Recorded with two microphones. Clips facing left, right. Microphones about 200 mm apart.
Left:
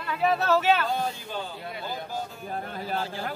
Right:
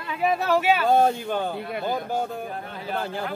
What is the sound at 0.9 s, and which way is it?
Speech, 55° right (ahead or behind).